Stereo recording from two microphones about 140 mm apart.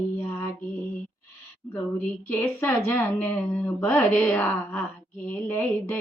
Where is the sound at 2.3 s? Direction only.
15° left (ahead or behind).